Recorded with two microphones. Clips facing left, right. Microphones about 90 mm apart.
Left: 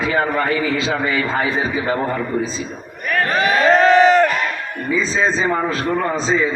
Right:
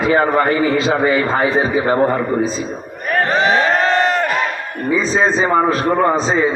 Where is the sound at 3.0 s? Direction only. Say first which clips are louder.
Right 2 dB; 30° right (ahead or behind).